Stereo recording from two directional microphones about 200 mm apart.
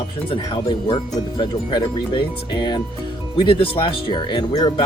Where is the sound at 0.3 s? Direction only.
25° left (ahead or behind).